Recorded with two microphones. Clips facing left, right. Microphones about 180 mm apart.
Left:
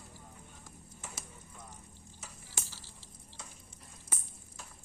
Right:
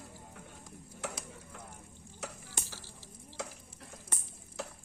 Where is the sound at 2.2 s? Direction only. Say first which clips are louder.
Right 11 dB; 70° right (ahead or behind).